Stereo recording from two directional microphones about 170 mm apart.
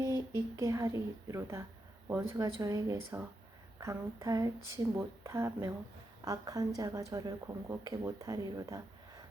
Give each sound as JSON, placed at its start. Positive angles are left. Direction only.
{"t": 0.0, "sound": "speech", "side_deg": -20}